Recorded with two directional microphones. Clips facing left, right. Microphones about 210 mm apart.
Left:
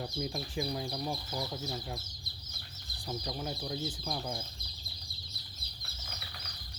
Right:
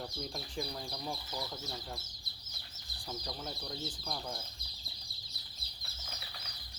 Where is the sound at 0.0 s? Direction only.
5° left (ahead or behind).